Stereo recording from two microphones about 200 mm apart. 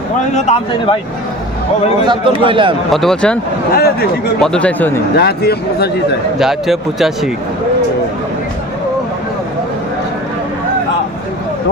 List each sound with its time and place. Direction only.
0.3 s speech: 30° left (ahead or behind)
2.0 s a man's voice: 25° right (ahead or behind)
2.9 s speech: centre (ahead or behind)
3.7 s speech: 50° left (ahead or behind)
4.4 s speech: 5° left (ahead or behind)
5.1 s speech: 55° left (ahead or behind)
6.4 s speech: centre (ahead or behind)